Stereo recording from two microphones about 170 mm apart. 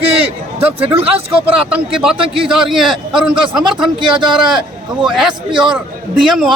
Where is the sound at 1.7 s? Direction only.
5° right (ahead or behind).